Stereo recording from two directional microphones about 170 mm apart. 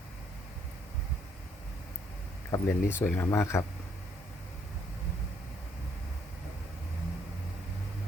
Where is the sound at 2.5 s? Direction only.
15° left (ahead or behind).